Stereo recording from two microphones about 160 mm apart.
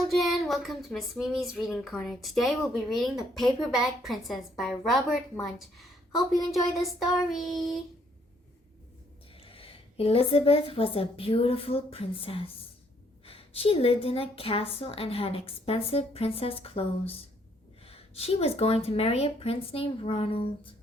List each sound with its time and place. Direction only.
0.0 s speech: centre (ahead or behind)
9.3 s a woman's voice: 35° left (ahead or behind)